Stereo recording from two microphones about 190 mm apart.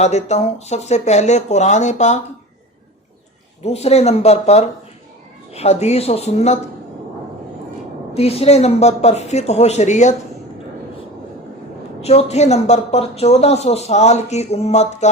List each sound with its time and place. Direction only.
0.0 s speech: 35° left (ahead or behind)
3.6 s speech: 35° left (ahead or behind)
8.1 s speech: 30° left (ahead or behind)
12.0 s speech: 35° left (ahead or behind)